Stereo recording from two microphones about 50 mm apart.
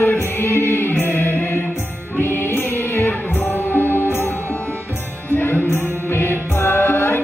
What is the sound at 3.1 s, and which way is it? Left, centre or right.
Music, left.